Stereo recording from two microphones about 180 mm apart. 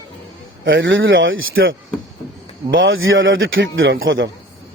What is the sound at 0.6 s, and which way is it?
A man's voice, 90° right.